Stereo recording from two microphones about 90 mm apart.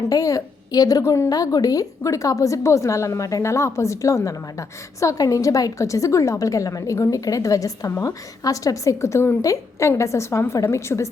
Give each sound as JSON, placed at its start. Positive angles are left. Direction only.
{"t": 0.1, "sound": "a woman's voice", "side_deg": 40}